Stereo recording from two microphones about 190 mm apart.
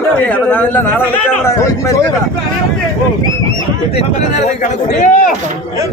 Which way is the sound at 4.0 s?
40° left (ahead or behind).